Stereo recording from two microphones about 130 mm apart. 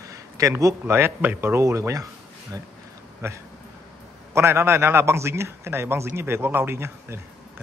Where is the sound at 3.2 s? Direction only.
20° right (ahead or behind).